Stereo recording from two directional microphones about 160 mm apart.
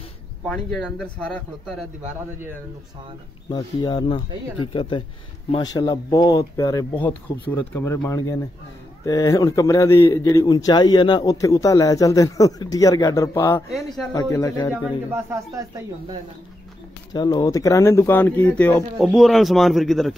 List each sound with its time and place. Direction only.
0.5 s speech: 5° left (ahead or behind)
3.4 s a man's voice: 25° left (ahead or behind)
13.7 s speech: centre (ahead or behind)
14.1 s a man's voice: 20° left (ahead or behind)
15.0 s speech: 15° right (ahead or behind)
17.1 s speech: 25° left (ahead or behind); by 18.9 s 10° left (ahead or behind)
18.9 s speech: centre (ahead or behind)